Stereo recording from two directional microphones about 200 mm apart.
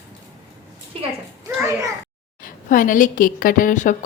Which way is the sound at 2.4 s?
40° left (ahead or behind).